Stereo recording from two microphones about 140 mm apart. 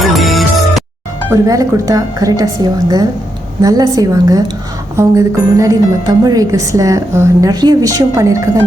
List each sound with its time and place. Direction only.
0.0 s music: centre (ahead or behind)
1.3 s a woman's voice: 25° right (ahead or behind)